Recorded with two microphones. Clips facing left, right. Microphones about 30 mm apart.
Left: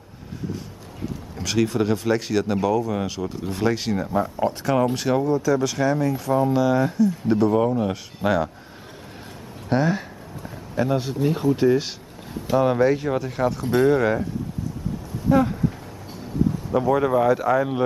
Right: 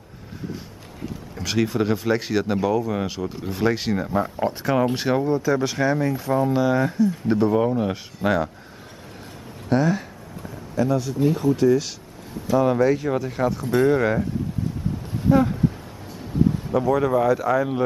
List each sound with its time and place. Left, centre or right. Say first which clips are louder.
1.3 s speech: left 1 dB; centre
5.2 s speech: left 1 dB; right; by 8.5 s centre
9.7 s speech: right 1 dB; centre
10.5 s a sound: right 1 dB; left
11.2 s speech: right 1 dB; left
12.5 s speech: even; centre
15.3 s speech: even; centre
16.7 s speech: left 1 dB; centre